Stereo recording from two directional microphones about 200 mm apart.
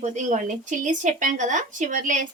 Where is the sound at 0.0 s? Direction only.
35° right (ahead or behind).